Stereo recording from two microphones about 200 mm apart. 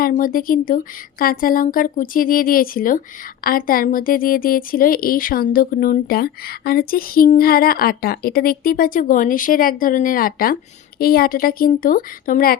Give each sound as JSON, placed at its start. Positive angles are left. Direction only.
{"t": 0.0, "sound": "speech", "side_deg": 45}